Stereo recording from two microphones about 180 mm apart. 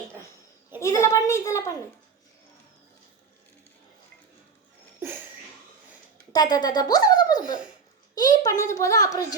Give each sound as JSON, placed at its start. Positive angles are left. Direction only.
{"t": 0.8, "sound": "a child's voice", "side_deg": 15}
{"t": 6.3, "sound": "a child's voice", "side_deg": 20}